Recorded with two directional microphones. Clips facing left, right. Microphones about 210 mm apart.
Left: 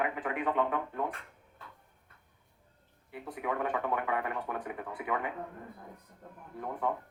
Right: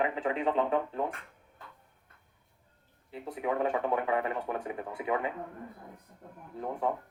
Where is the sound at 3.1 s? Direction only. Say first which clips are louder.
Right 3 dB; 25° right (ahead or behind).